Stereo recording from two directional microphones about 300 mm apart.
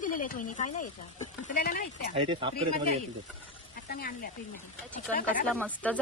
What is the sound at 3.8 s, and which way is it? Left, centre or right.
Speech, left.